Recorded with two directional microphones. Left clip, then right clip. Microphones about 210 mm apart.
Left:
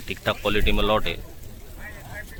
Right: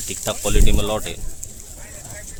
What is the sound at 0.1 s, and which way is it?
Speech, 15° right (ahead or behind).